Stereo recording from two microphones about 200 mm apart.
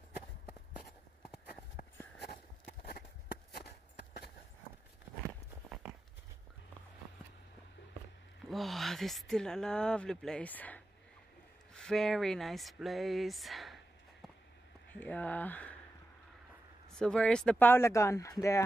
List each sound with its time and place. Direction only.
2.2 s walk: 50° left (ahead or behind)
5.2 s walk: 10° right (ahead or behind)
8.5 s speech: centre (ahead or behind)
14.9 s speech: 10° left (ahead or behind)
16.9 s speech: 5° left (ahead or behind)